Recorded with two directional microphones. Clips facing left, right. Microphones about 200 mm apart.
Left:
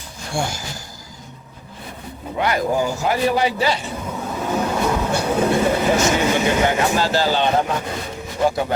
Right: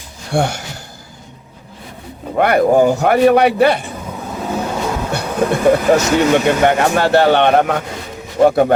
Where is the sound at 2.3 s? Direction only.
55° right (ahead or behind).